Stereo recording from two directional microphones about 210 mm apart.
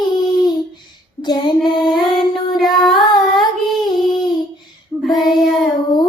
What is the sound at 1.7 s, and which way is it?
Female singing, 20° left (ahead or behind).